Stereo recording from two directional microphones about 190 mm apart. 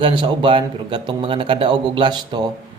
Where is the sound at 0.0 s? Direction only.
25° right (ahead or behind).